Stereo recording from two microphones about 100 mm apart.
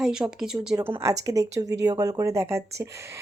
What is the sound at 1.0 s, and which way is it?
Speech, 35° right (ahead or behind).